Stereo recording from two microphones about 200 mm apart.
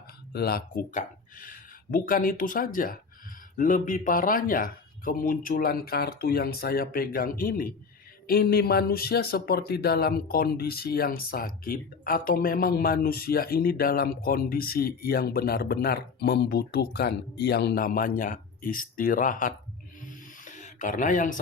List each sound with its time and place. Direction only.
0.3 s speech: 50° left (ahead or behind)
20.1 s snake: 40° left (ahead or behind)